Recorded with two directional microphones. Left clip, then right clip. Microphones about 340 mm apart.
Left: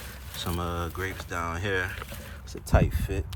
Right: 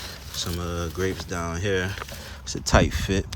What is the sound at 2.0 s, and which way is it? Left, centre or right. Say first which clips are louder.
Speech: right 5 dB; right.